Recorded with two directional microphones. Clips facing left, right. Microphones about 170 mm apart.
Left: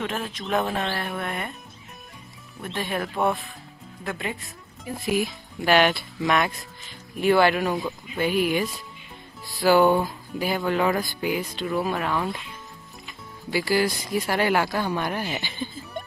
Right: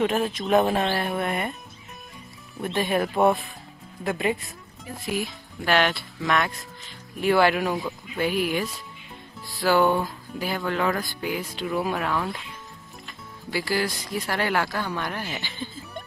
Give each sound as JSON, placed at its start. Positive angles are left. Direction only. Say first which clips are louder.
{"t": 0.0, "sound": "speech", "louder": "right 6 dB", "side_deg": -15}
{"t": 2.6, "sound": "speech", "louder": "right 5 dB", "side_deg": -15}
{"t": 5.0, "sound": "speech", "louder": "left 4 dB", "side_deg": 10}
{"t": 7.2, "sound": "speech", "louder": "left 1 dB", "side_deg": 0}
{"t": 9.6, "sound": "speech", "louder": "left 3 dB", "side_deg": 10}
{"t": 11.5, "sound": "speech", "louder": "left 1 dB", "side_deg": -5}